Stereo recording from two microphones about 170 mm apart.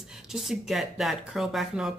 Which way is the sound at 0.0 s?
5° right (ahead or behind).